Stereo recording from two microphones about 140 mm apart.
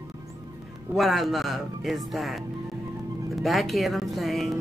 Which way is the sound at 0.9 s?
Centre (ahead or behind).